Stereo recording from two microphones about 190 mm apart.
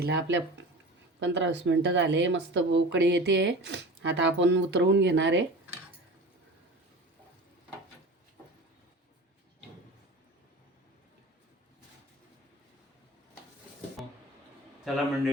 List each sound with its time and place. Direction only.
0.0 s speech: 65° right (ahead or behind)